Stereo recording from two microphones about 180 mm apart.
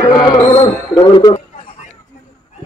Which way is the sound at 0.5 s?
20° left (ahead or behind).